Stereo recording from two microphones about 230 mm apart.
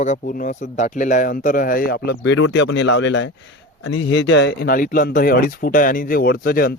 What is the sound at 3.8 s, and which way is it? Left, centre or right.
Speech, left.